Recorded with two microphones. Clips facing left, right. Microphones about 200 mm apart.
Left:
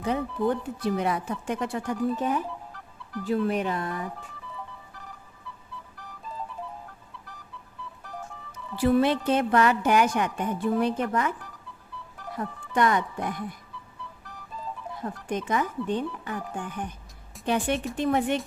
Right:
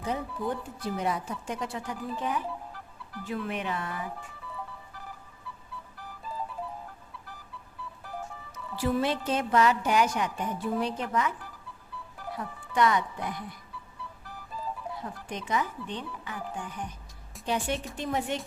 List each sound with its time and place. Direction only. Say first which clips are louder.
0.1 s a woman's voice: left 6 dB; 70° left (ahead or behind)
2.1 s speech: left 4 dB; 45° left (ahead or behind)
8.8 s a woman's voice: left 6 dB; 60° left (ahead or behind)
12.4 s speech: left 2 dB; 50° left (ahead or behind)
15.3 s a woman's voice: left 4 dB; 50° left (ahead or behind)